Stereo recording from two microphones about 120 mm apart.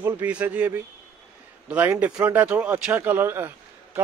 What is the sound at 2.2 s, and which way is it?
A man's voice, 15° right (ahead or behind).